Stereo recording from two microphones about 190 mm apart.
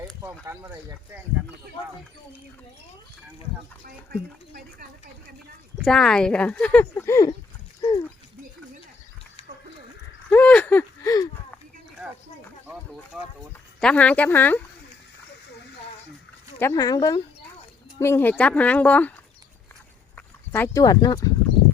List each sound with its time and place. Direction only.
0.0 s a sound: 10° right (ahead or behind)
0.6 s speech: 10° right (ahead or behind)
3.8 s speech: 50° right (ahead or behind)
5.8 s speech: 5° left (ahead or behind)
7.8 s dog: 20° left (ahead or behind)
10.2 s a sound: 5° left (ahead or behind)
13.1 s speech: 5° right (ahead or behind)
13.8 s speech: 5° left (ahead or behind)
16.6 s speech: 15° left (ahead or behind)
20.1 s speech: 10° left (ahead or behind)